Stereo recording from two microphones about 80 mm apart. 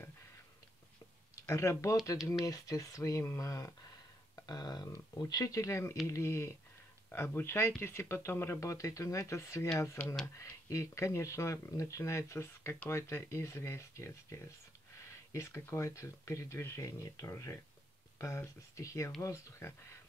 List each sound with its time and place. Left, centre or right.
1.3 s speech: left
4.5 s speech: left
4.8 s speech: left
7.1 s speech: left